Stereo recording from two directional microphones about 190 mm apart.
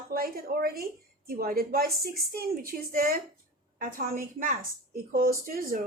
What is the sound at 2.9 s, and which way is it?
A woman's voice, 50° right (ahead or behind).